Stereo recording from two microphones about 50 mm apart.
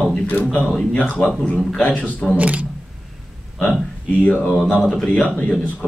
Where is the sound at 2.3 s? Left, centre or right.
Right.